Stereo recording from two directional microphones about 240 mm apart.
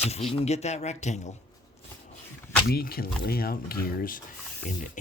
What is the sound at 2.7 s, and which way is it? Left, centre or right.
Speech, left.